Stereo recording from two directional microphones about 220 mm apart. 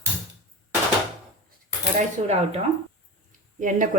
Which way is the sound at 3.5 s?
35° right (ahead or behind).